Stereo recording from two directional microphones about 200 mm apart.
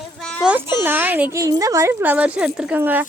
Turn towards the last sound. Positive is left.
turn(degrees=-10)  # may be behind; listen again after turning